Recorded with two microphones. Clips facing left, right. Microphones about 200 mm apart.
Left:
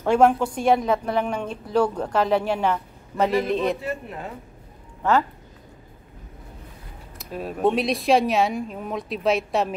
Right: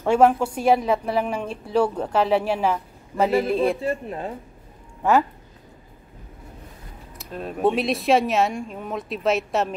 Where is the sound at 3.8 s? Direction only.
30° right (ahead or behind).